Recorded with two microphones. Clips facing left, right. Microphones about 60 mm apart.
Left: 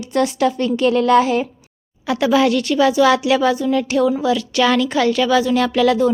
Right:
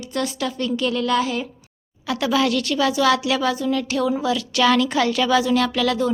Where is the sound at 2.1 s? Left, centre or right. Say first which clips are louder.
Left 5 dB; centre.